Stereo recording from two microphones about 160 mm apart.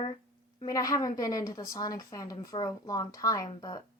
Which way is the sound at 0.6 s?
20° left (ahead or behind).